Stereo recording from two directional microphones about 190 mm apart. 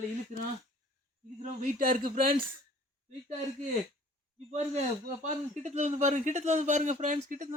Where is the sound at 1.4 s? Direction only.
45° right (ahead or behind).